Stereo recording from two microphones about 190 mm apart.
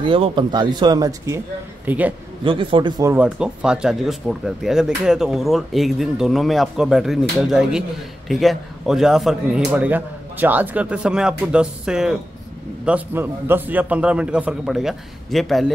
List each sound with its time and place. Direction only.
0.0 s a man's voice: 25° right (ahead or behind); by 2.1 s 10° right (ahead or behind)
2.4 s speech: 25° right (ahead or behind)
3.1 s a man's voice: 5° right (ahead or behind)